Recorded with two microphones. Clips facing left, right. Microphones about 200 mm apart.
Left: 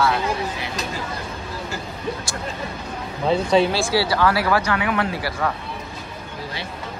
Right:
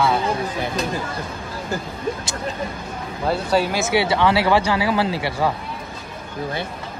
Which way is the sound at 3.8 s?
20° right (ahead or behind).